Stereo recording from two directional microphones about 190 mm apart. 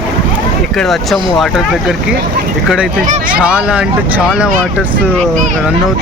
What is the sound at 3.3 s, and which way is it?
Speech, 5° right (ahead or behind).